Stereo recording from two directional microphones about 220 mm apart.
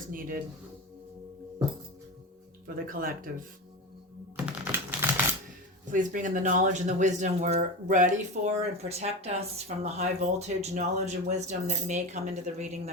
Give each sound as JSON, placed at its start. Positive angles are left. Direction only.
{"t": 0.1, "sound": "speech", "side_deg": -40}
{"t": 2.6, "sound": "speech", "side_deg": -40}
{"t": 4.6, "sound": "typing", "side_deg": -10}
{"t": 5.9, "sound": "speech", "side_deg": -35}